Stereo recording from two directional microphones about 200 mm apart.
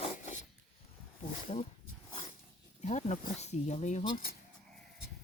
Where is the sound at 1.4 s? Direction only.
30° left (ahead or behind).